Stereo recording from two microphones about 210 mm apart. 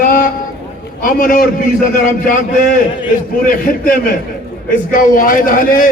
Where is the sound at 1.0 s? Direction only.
40° left (ahead or behind).